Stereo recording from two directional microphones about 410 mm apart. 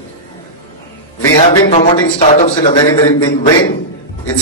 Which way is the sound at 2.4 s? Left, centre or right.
Centre.